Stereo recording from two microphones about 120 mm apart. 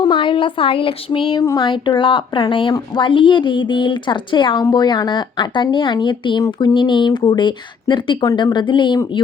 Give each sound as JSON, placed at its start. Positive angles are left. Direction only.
{"t": 0.0, "sound": "speech", "side_deg": 40}
{"t": 1.4, "sound": "speech", "side_deg": 35}